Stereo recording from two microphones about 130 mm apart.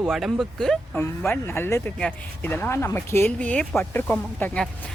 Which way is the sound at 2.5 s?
15° left (ahead or behind).